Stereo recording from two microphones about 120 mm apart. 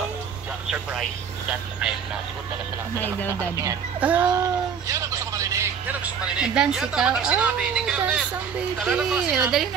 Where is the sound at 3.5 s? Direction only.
25° right (ahead or behind).